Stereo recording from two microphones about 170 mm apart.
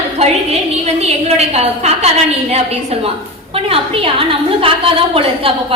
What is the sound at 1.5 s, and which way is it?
Speech, 40° right (ahead or behind).